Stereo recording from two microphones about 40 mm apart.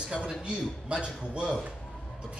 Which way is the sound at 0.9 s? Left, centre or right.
Right.